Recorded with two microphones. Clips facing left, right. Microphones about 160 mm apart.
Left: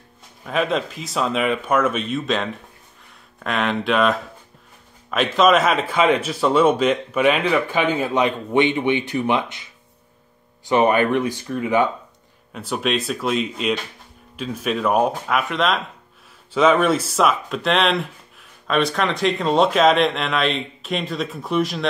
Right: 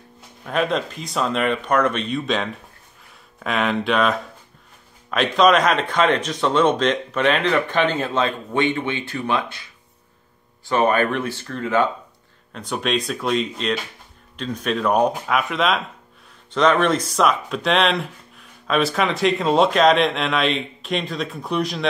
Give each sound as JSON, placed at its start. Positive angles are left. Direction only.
{"t": 0.4, "sound": "speech", "side_deg": 0}
{"t": 12.5, "sound": "speech", "side_deg": 5}